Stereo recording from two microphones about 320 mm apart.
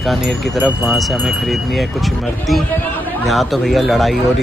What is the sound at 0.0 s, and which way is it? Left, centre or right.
Speech, centre.